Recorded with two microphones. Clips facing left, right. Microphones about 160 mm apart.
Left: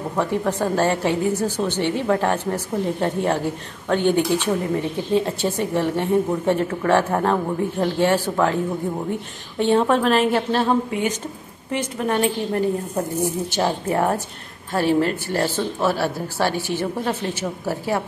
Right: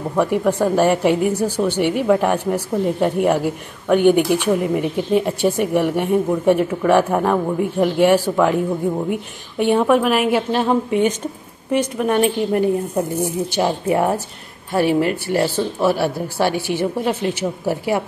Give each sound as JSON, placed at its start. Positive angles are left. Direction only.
{"t": 0.2, "sound": "a woman's voice", "side_deg": -15}